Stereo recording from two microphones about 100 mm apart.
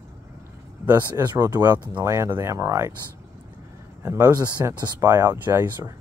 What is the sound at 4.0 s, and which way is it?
Speech, 30° right (ahead or behind).